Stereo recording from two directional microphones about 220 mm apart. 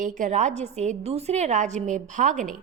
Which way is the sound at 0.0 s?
35° right (ahead or behind).